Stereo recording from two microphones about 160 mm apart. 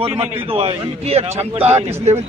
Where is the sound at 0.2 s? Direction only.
35° right (ahead or behind).